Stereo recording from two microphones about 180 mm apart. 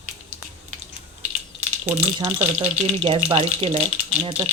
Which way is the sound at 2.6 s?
35° right (ahead or behind).